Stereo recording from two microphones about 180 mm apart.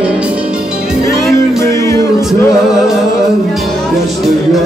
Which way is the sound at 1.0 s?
20° left (ahead or behind).